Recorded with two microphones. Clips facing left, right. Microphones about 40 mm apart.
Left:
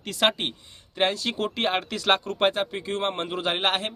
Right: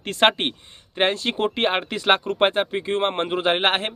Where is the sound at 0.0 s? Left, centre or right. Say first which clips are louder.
Right 5 dB; right.